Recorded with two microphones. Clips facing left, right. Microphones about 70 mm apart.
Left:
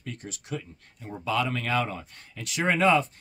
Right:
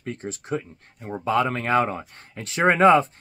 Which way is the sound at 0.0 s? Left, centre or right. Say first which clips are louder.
Right 7 dB; right.